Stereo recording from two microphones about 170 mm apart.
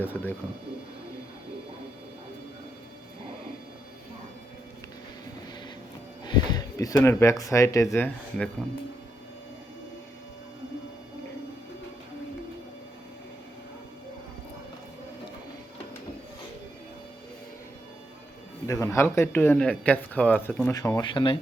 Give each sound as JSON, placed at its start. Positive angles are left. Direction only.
{"t": 0.0, "sound": "speech", "side_deg": 10}
{"t": 6.2, "sound": "speech", "side_deg": 25}
{"t": 18.7, "sound": "speech", "side_deg": 20}
{"t": 20.7, "sound": "speech", "side_deg": 20}